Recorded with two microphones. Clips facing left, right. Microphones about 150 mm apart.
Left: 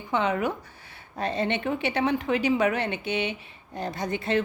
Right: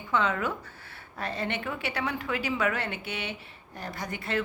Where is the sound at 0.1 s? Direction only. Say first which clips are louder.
Left 3 dB; 20° left (ahead or behind).